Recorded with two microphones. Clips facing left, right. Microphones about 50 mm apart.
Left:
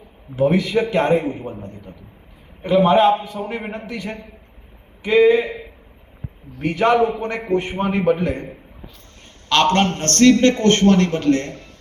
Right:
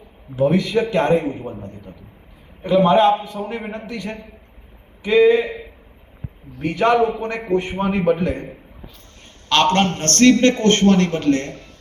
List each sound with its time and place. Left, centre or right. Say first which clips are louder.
0.3 s a man's voice: even; centre
2.6 s a man's voice: even; centre
6.6 s a man's voice: even; centre